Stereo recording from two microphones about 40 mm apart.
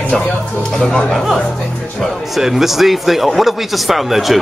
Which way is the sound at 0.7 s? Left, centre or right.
Left.